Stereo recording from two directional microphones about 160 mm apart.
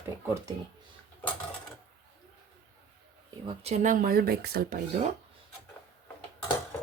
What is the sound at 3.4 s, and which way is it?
Speech, 45° right (ahead or behind).